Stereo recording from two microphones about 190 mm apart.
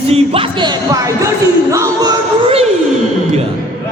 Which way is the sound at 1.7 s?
15° right (ahead or behind).